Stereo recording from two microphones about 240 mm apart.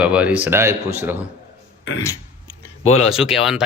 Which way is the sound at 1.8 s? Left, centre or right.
Left.